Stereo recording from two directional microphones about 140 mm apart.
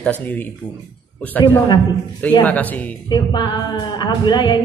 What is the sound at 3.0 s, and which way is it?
Speech, 30° left (ahead or behind).